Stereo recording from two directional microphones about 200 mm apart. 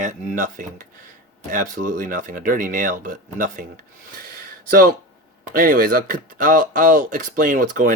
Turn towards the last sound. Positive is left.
turn(degrees=-40)  # may be behind; listen again after turning